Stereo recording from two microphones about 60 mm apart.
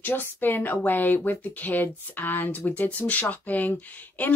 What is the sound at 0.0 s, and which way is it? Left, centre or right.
Speech, left.